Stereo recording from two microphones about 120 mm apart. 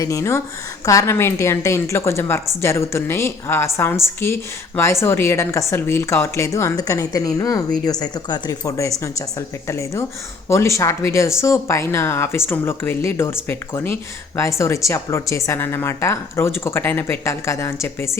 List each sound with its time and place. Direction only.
0.0 s a woman's voice: 25° left (ahead or behind)